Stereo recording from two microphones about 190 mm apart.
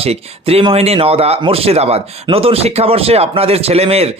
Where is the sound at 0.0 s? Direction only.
30° right (ahead or behind).